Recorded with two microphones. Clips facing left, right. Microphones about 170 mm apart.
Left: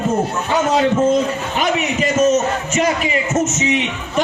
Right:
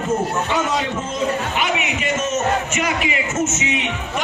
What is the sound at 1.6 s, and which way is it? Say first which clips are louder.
A man's voice: left 4 dB; 40° left (ahead or behind).